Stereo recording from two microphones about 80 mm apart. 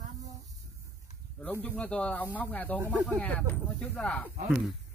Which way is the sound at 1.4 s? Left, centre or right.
Centre.